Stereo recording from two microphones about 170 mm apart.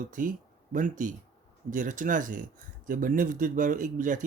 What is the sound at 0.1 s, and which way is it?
Speech, 50° right (ahead or behind).